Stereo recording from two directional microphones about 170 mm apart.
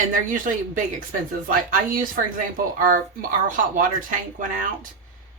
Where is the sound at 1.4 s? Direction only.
55° right (ahead or behind).